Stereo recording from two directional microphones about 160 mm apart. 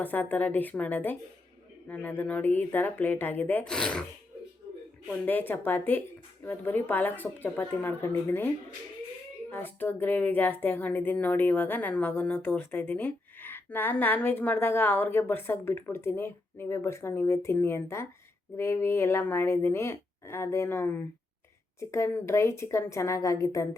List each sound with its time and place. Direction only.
0.0 s speech: 10° left (ahead or behind)
5.2 s speech: 10° left (ahead or behind)
9.5 s speech: 15° left (ahead or behind)